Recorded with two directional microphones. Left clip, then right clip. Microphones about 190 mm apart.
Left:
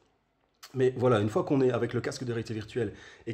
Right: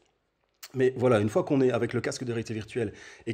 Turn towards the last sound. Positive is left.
turn(degrees=-35)  # may be behind; listen again after turning